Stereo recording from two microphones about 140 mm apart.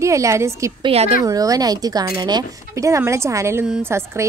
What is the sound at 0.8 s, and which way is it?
Speech, 45° right (ahead or behind).